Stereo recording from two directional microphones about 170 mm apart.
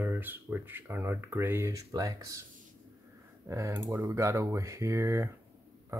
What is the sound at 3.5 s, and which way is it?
Speech, 20° right (ahead or behind).